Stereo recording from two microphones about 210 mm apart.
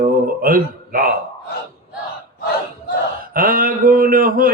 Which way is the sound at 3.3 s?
40° right (ahead or behind).